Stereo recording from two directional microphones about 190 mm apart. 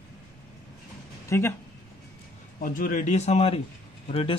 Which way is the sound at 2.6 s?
45° left (ahead or behind).